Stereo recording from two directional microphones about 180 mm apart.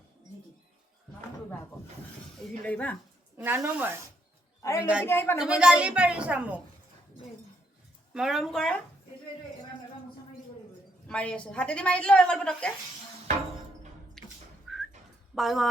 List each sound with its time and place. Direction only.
2.6 s speech: 10° left (ahead or behind)
3.3 s a woman's voice: 10° right (ahead or behind)
4.6 s speech: 15° left (ahead or behind)
5.4 s a woman's voice: 5° right (ahead or behind)
8.1 s a woman's voice: centre (ahead or behind)
11.1 s a woman's voice: 5° left (ahead or behind)
14.2 s a sound: 5° left (ahead or behind)
15.4 s a woman's voice: centre (ahead or behind)